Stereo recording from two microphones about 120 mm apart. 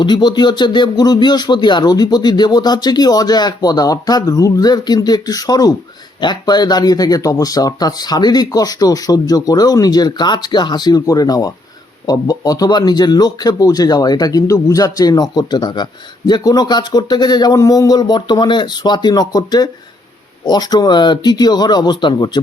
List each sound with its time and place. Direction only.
0.0 s speech: 35° left (ahead or behind)